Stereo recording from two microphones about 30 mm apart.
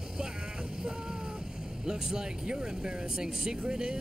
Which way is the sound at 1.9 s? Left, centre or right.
Right.